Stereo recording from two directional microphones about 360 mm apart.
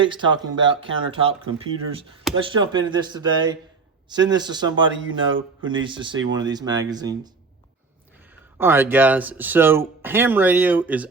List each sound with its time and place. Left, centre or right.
0.0 s speech: centre
4.7 s speech: right
5.8 s speech: centre
8.5 s speech: centre